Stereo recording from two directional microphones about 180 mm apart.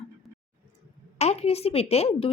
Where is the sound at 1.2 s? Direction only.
35° left (ahead or behind).